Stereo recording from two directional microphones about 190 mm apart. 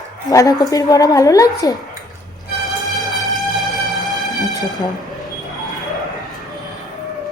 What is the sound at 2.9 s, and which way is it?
Music, centre (ahead or behind).